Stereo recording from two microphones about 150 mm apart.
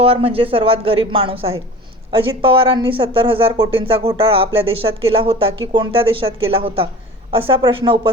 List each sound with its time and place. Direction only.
0.0 s speech: 40° right (ahead or behind)